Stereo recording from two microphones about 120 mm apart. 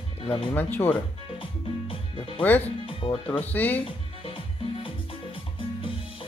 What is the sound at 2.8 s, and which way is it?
Speech, 45° left (ahead or behind).